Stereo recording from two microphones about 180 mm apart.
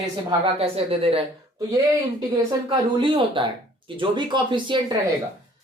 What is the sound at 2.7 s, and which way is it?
Speech, 25° right (ahead or behind).